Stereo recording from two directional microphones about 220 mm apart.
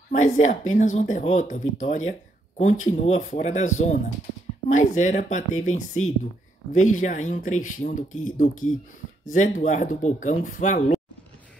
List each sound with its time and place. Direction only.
0.1 s speech: 35° left (ahead or behind)